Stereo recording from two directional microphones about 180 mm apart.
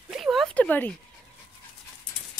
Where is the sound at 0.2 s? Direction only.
Centre (ahead or behind).